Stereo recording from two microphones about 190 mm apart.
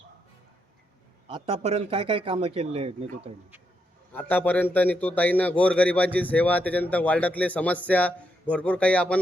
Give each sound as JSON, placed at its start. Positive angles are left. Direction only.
{"t": 1.3, "sound": "speech", "side_deg": -35}
{"t": 4.1, "sound": "a man's voice", "side_deg": 10}